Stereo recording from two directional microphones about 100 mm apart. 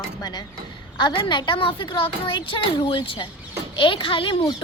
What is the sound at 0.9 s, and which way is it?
A child's voice, 50° left (ahead or behind).